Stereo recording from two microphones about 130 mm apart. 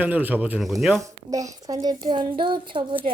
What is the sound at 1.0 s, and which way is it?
A woman's voice, 25° right (ahead or behind).